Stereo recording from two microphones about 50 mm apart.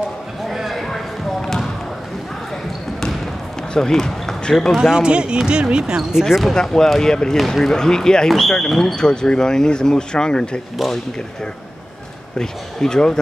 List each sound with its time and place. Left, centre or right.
0.5 s basketball bounce: centre
3.7 s speech: centre
4.7 s speech: centre
6.2 s speech: centre
6.5 s speech: centre
12.4 s speech: centre